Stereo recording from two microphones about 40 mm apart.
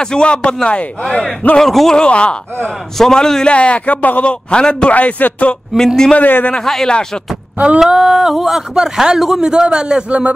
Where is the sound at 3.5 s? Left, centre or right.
Left.